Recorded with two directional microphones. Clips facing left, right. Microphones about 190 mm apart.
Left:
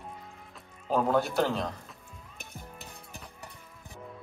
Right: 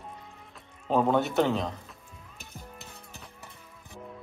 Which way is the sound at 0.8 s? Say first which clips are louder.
Right 2 dB; centre (ahead or behind).